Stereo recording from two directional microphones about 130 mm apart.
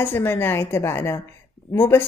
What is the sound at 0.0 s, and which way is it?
Speech, 15° left (ahead or behind).